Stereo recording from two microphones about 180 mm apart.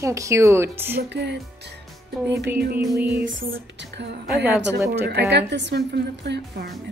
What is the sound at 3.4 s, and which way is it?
A woman's voice, 65° right (ahead or behind).